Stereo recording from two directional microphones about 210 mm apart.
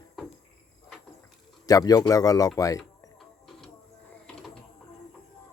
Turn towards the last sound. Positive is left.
turn(degrees=0)  # may be behind; listen again after turning